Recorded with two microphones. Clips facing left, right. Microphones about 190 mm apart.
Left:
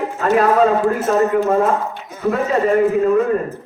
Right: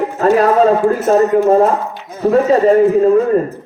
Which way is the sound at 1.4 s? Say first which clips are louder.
Right 5 dB; 35° right (ahead or behind).